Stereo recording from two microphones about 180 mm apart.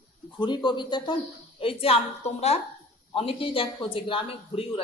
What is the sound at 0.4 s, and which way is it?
A man's voice, 25° left (ahead or behind).